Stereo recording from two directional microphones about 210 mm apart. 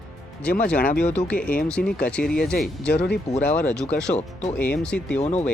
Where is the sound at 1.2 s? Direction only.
5° left (ahead or behind).